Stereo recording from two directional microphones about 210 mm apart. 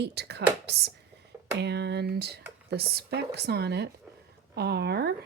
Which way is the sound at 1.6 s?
55° right (ahead or behind).